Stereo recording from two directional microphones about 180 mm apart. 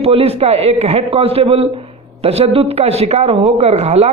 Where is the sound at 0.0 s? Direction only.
35° right (ahead or behind).